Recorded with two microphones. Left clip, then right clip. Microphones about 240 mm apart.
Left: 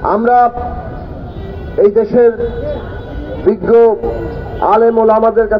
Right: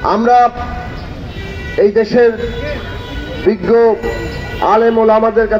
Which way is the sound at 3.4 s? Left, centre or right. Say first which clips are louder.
Left 2 dB; right.